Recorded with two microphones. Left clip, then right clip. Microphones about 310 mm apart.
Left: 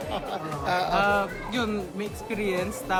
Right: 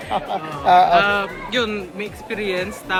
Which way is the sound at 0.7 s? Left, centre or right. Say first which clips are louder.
Right 14 dB; centre.